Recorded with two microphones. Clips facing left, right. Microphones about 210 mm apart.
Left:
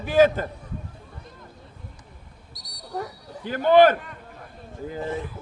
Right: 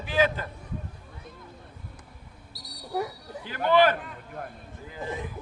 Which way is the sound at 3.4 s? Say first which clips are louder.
Left 6 dB; 50° left (ahead or behind).